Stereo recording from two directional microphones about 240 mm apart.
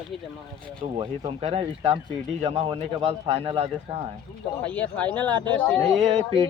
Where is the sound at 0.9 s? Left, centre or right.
Right.